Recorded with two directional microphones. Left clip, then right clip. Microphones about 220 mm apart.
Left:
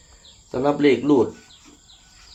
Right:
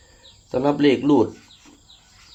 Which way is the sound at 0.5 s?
45° right (ahead or behind).